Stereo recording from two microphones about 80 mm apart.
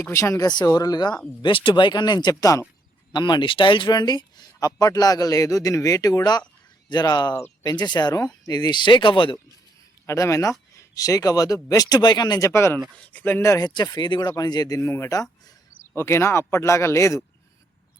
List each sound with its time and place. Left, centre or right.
0.1 s speech: left
1.4 s speech: left
2.3 s speech: left
3.1 s speech: left
10.1 s speech: left
12.4 s speech: left
13.1 s speech: left
13.4 s speech: left
13.7 s speech: left
14.8 s speech: left
15.1 s speech: left
16.0 s speech: left